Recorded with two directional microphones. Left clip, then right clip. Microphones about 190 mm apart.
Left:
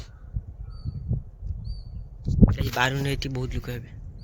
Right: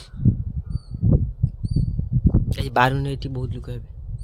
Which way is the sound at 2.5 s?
45° right (ahead or behind).